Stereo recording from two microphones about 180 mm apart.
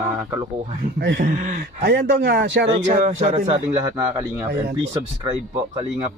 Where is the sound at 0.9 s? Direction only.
65° right (ahead or behind).